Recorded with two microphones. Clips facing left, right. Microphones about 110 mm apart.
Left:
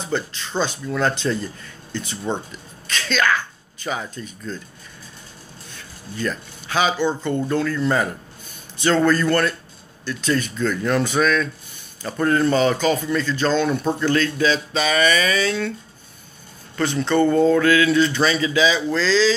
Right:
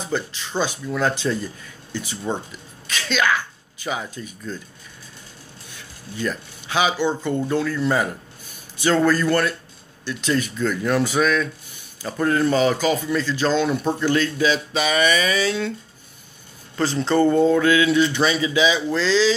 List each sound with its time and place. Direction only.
0.0 s speech: 10° right (ahead or behind)
6.1 s speech: 15° right (ahead or behind)
16.7 s speech: 30° right (ahead or behind)
17.4 s speech: 15° right (ahead or behind)